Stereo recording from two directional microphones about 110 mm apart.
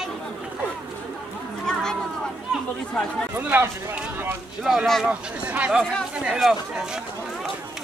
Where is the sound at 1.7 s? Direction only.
5° left (ahead or behind).